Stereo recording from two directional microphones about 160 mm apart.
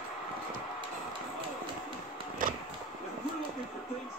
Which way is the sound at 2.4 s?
60° right (ahead or behind).